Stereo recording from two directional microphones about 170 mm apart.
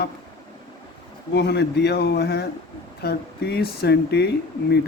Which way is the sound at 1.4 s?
90° left.